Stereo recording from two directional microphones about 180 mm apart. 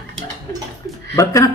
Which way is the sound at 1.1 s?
20° left (ahead or behind).